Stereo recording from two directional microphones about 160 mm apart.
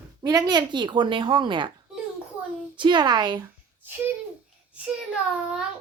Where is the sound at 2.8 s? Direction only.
30° right (ahead or behind).